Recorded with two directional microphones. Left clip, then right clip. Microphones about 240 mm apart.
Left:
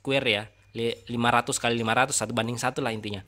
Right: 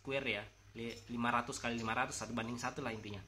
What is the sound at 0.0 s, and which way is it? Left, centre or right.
Speech, left.